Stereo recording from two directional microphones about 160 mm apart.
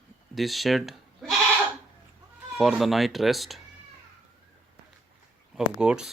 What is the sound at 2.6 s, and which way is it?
Speech, centre (ahead or behind).